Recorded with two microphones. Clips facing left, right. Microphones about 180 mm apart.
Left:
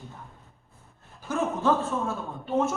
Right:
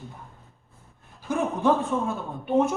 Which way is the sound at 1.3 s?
15° right (ahead or behind).